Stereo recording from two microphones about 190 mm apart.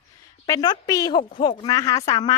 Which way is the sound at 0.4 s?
20° left (ahead or behind).